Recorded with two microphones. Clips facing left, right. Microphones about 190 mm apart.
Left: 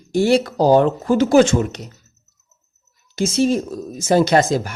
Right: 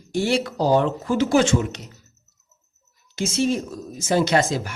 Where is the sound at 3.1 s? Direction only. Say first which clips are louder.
Left 5 dB; 40° left (ahead or behind).